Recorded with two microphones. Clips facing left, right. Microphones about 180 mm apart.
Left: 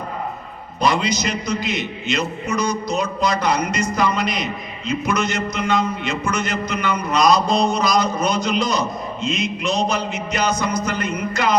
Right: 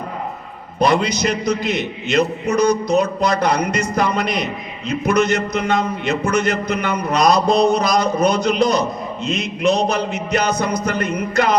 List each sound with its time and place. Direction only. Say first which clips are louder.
0.8 s a man's voice: right 3 dB; 60° right (ahead or behind)